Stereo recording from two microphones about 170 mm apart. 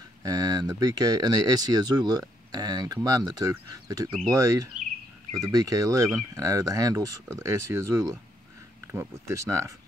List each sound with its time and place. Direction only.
0.2 s speech: 20° right (ahead or behind)